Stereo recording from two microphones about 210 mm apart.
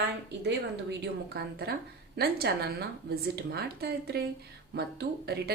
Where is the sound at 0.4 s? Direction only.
50° right (ahead or behind).